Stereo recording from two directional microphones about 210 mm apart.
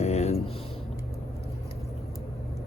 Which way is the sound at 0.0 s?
30° left (ahead or behind).